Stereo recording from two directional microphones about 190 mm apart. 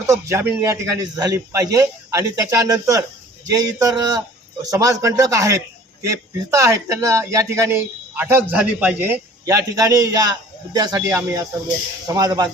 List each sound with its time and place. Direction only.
0.1 s a man's voice: 15° right (ahead or behind)